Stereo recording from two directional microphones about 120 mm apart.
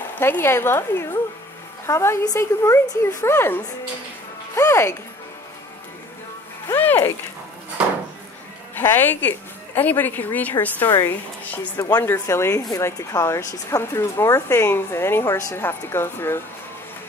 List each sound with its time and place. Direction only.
0.2 s a woman's voice: 20° left (ahead or behind)
6.7 s speech: 15° left (ahead or behind)
8.7 s a woman's voice: 15° left (ahead or behind)